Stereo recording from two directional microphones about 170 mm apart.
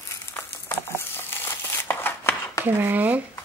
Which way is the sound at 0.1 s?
15° left (ahead or behind).